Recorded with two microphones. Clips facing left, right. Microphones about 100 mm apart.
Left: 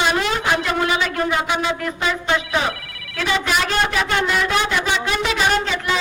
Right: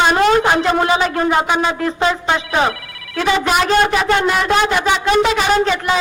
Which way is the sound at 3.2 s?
40° right (ahead or behind).